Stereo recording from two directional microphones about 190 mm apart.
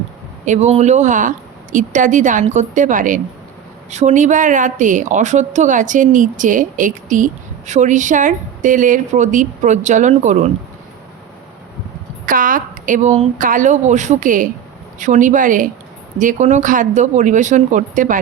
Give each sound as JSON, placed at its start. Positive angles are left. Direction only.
{"t": 0.4, "sound": "a woman's voice", "side_deg": -40}
{"t": 12.2, "sound": "a woman's voice", "side_deg": -45}